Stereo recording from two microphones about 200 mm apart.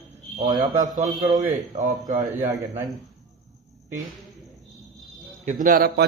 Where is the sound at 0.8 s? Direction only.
35° right (ahead or behind).